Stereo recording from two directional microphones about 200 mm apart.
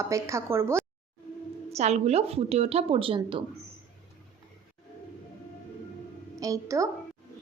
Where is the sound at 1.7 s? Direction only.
35° right (ahead or behind).